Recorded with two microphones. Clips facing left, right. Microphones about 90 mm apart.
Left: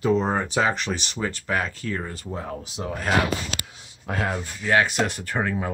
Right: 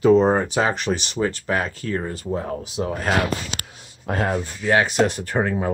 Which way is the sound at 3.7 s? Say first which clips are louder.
Right 7 dB; 45° right (ahead or behind).